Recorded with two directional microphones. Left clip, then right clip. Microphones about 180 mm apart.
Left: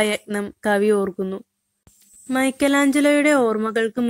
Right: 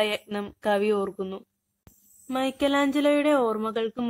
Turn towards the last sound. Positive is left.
turn(degrees=35)  # may be behind; listen again after turning